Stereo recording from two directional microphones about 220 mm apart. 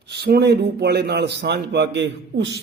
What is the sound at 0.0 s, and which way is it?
A man's voice, 50° right (ahead or behind).